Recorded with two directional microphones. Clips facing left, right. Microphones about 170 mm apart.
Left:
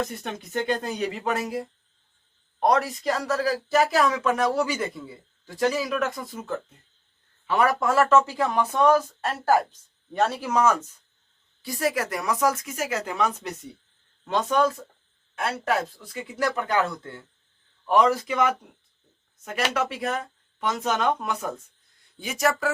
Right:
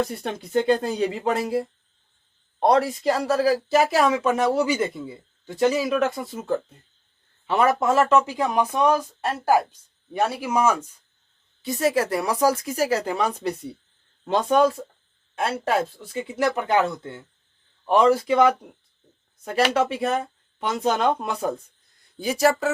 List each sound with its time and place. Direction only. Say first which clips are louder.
0.1 s speech: right 6 dB; 30° right (ahead or behind); by 10.8 s 10° right (ahead or behind)
11.6 s speech: right 4 dB; 25° right (ahead or behind)
19.7 s speech: right 5 dB; 25° right (ahead or behind)